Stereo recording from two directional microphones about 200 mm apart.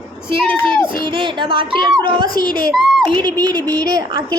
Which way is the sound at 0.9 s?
25° right (ahead or behind).